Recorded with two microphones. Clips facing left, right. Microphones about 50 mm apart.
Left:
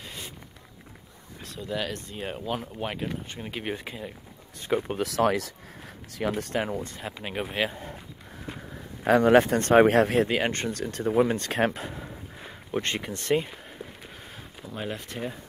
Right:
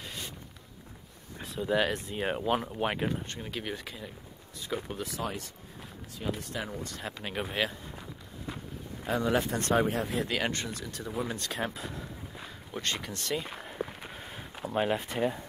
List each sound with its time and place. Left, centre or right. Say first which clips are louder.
0.0 s a sound: left 1 dB; centre
1.4 s speech: right 4 dB; centre
3.3 s speech: left 3 dB; centre
4.7 s speech: left 9 dB; left
5.0 s speech: left 11 dB; left
6.3 s speech: left 8 dB; left
7.0 s speech: left 3 dB; centre
9.0 s speech: left 10 dB; left
9.8 s speech: left 11 dB; left
10.2 s speech: left 5 dB; left
10.7 s speech: left 10 dB; left
11.8 s a sound: left 3 dB; left
13.8 s a sound: right 7 dB; right
14.8 s speech: right 5 dB; centre